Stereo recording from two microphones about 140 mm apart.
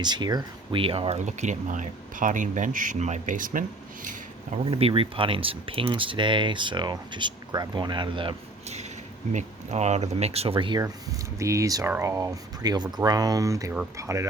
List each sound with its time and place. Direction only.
0.0 s speech: 30° right (ahead or behind)
1.2 s speech: 60° right (ahead or behind)
4.5 s speech: 40° right (ahead or behind)
8.6 s a sound: 50° right (ahead or behind)
9.3 s speech: 55° right (ahead or behind); by 10.8 s 40° right (ahead or behind)
11.3 s speech: 20° right (ahead or behind)